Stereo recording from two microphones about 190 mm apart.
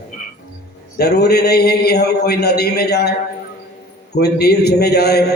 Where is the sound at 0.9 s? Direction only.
60° left (ahead or behind).